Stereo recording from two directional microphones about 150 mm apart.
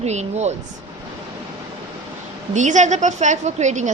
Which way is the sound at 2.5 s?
55° right (ahead or behind).